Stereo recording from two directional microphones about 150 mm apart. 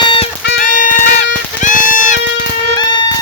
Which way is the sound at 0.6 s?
65° left (ahead or behind).